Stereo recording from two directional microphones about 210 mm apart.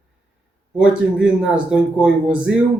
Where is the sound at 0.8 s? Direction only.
5° right (ahead or behind).